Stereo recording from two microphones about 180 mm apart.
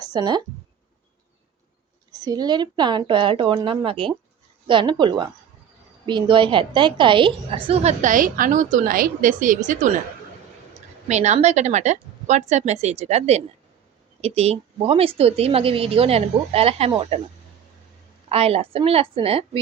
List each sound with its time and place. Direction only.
0.0 s speech: 20° right (ahead or behind)
2.2 s a woman's voice: 25° right (ahead or behind); by 9.9 s 45° right (ahead or behind)
11.1 s a woman's voice: 40° right (ahead or behind)
18.3 s a woman's voice: 35° right (ahead or behind)